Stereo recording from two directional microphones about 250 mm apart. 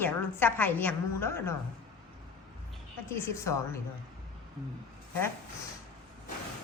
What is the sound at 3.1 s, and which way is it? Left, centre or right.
Speech, centre.